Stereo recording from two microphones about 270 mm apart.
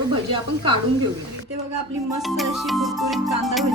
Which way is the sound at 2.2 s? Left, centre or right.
Centre.